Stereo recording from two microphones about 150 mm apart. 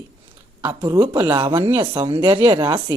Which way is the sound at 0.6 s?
25° right (ahead or behind).